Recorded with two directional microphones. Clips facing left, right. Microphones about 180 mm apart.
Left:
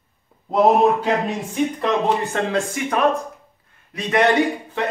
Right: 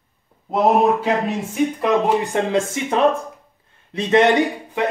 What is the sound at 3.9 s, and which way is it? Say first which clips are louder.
Speech: right 3 dB; 25° right (ahead or behind).